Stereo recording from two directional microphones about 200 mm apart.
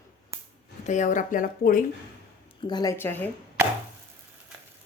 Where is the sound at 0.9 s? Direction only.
40° left (ahead or behind).